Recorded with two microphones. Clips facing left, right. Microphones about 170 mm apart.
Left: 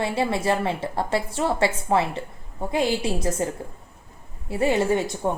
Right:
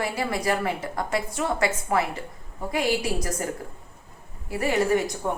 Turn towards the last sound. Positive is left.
turn(degrees=25)  # may be behind; listen again after turning